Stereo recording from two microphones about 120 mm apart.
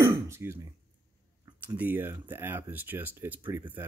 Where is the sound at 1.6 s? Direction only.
15° right (ahead or behind).